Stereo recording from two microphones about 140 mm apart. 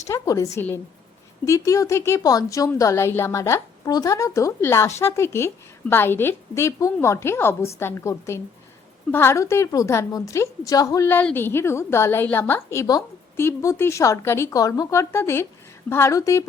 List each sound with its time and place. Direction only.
0.1 s a woman's voice: 20° left (ahead or behind)